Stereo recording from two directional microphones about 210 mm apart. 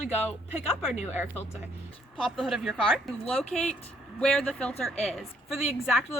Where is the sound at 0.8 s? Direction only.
10° right (ahead or behind).